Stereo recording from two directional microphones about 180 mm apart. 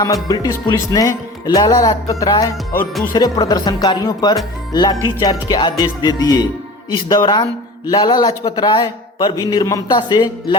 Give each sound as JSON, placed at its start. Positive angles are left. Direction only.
{"t": 0.0, "sound": "speech", "side_deg": 20}